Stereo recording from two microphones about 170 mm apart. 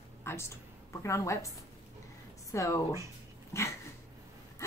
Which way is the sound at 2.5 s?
20° left (ahead or behind).